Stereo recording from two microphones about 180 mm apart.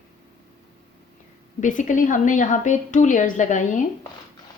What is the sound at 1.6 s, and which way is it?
A woman's voice, 45° left (ahead or behind).